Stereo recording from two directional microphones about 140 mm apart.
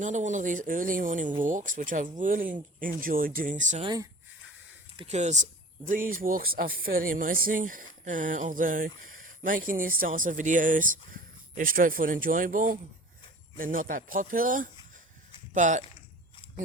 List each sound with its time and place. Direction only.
0.0 s speech: 60° right (ahead or behind)
2.8 s speech: 85° right; by 3.8 s 60° right (ahead or behind)
3.8 s speech: 25° right (ahead or behind)
5.0 s speech: 55° right (ahead or behind)
5.9 s speech: 80° right
15.5 s speech: 60° right (ahead or behind)